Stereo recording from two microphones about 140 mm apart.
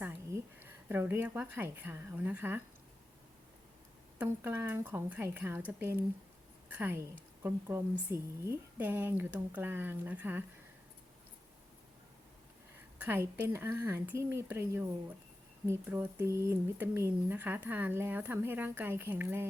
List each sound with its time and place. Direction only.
0.0 s a sound: 15° right (ahead or behind)
0.9 s speech: 15° right (ahead or behind)
4.2 s speech: 15° right (ahead or behind)
13.0 s speech: 15° right (ahead or behind)